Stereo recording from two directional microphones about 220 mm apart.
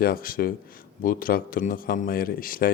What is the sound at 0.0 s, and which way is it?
A man's voice, 40° left (ahead or behind).